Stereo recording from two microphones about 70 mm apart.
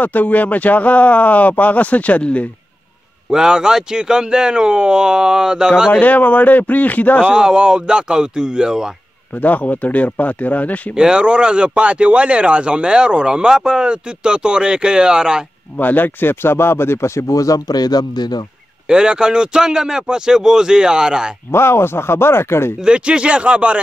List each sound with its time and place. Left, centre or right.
0.0 s speech: left
3.3 s speech: centre
5.9 s speech: left
7.2 s speech: centre
9.4 s speech: left
11.0 s speech: centre
15.8 s speech: left
18.9 s speech: centre
21.5 s speech: left
22.8 s speech: centre